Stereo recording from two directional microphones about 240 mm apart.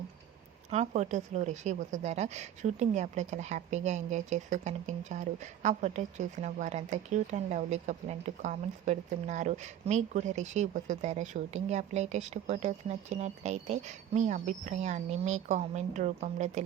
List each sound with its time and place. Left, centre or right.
0.7 s a woman's voice: right